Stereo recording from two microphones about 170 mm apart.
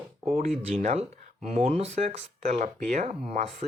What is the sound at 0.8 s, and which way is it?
Speech, 40° right (ahead or behind).